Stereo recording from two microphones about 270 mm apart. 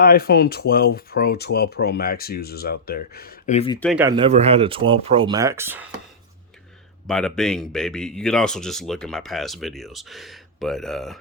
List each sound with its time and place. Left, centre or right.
0.0 s speech: left
3.8 s speech: centre
4.0 s speech: centre
7.1 s speech: centre